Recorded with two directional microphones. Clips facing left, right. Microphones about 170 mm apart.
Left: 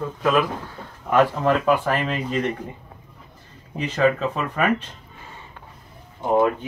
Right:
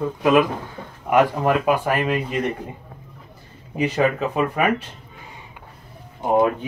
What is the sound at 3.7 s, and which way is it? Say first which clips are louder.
Speech: even; 10° right (ahead or behind).